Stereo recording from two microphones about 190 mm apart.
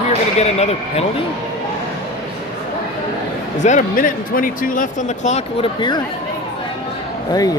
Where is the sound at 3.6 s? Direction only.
40° left (ahead or behind).